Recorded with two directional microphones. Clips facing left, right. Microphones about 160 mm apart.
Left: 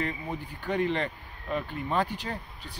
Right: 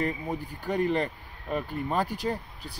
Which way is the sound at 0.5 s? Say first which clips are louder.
Right 1 dB; 10° right (ahead or behind).